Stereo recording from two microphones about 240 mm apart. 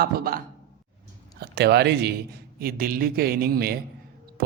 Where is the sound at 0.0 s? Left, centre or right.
Right.